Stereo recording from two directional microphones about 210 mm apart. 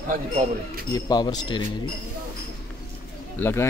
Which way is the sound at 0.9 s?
20° left (ahead or behind).